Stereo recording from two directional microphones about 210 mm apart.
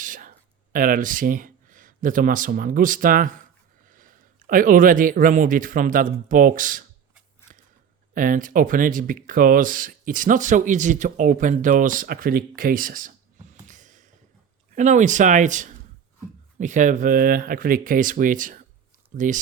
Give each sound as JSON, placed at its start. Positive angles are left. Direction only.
{"t": 0.0, "sound": "speech", "side_deg": -40}
{"t": 8.1, "sound": "speech", "side_deg": -40}